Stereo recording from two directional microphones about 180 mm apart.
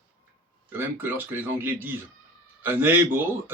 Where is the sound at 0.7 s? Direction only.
10° right (ahead or behind).